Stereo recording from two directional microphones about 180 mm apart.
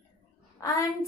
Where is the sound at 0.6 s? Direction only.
15° left (ahead or behind).